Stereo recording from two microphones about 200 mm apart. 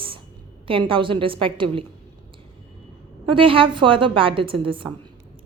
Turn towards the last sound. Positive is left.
turn(degrees=-25)  # may be behind; listen again after turning